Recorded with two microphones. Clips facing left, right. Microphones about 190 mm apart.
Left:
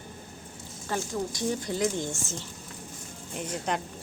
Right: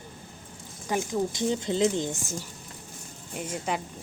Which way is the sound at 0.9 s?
20° right (ahead or behind).